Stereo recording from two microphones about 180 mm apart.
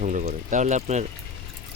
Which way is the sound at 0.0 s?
45° right (ahead or behind).